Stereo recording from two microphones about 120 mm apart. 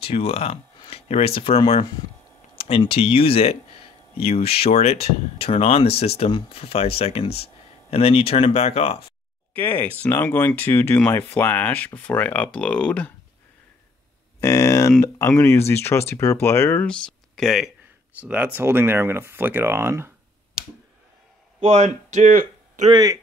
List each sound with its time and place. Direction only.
0.0 s speech: 55° left (ahead or behind)
9.5 s speech: 15° left (ahead or behind)
14.4 s speech: 25° left (ahead or behind)
16.8 s speech: 5° left (ahead or behind)
18.2 s speech: 10° right (ahead or behind)
21.5 s speech: 60° right (ahead or behind); by 22.8 s 90° right